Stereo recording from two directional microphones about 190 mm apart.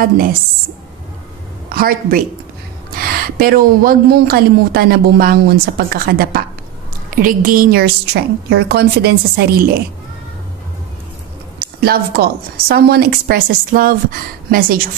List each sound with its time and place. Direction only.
0.0 s a woman's voice: 50° right (ahead or behind)
1.7 s a woman's voice: 50° right (ahead or behind)
11.6 s a woman's voice: 55° right (ahead or behind)